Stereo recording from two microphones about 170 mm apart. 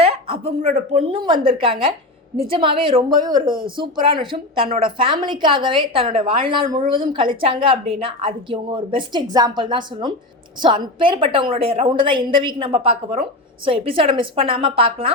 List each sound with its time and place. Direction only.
0.0 s a woman's voice: 35° right (ahead or behind)